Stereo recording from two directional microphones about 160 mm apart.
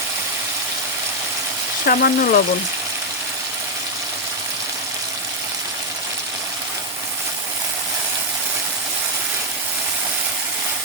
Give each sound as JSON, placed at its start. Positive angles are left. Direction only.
{"t": 1.9, "sound": "speech", "side_deg": 70}